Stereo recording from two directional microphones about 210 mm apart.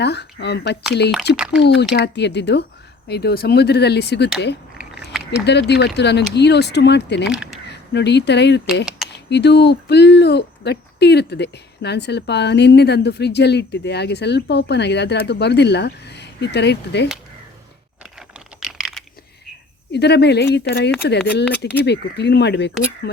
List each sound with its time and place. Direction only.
0.0 s speech: 55° left (ahead or behind)
5.3 s speech: 55° left (ahead or behind)
7.3 s speech: 5° right (ahead or behind)
7.7 s speech: 55° left (ahead or behind)
18.0 s computer keyboard: 5° right (ahead or behind)
19.9 s speech: 50° left (ahead or behind)